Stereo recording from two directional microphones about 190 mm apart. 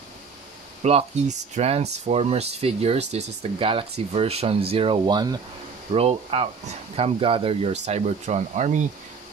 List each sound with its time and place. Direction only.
0.8 s speech: 35° right (ahead or behind)